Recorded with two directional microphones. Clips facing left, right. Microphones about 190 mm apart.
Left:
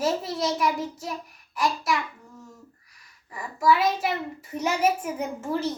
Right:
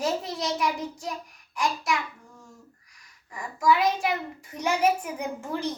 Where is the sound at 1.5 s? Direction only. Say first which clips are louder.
Left 2 dB; centre (ahead or behind).